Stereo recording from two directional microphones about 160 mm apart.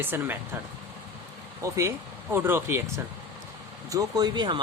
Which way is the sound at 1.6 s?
20° right (ahead or behind).